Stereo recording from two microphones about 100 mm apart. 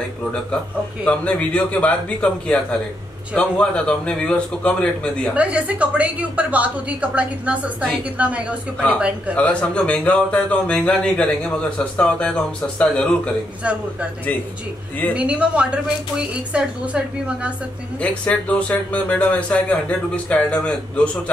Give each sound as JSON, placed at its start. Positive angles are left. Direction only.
{"t": 1.0, "sound": "speech", "side_deg": 15}
{"t": 5.3, "sound": "a woman's voice", "side_deg": -15}
{"t": 9.3, "sound": "speech", "side_deg": 15}
{"t": 15.1, "sound": "a woman's voice", "side_deg": -10}
{"t": 18.0, "sound": "speech", "side_deg": 10}